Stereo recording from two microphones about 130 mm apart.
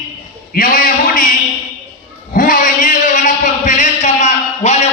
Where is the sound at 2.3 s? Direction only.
90° left.